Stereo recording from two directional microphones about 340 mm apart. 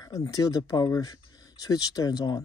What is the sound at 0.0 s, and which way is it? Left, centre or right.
Speech, centre.